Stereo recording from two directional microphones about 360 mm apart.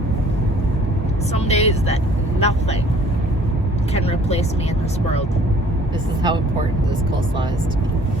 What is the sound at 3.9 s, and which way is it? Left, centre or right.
Speech, centre.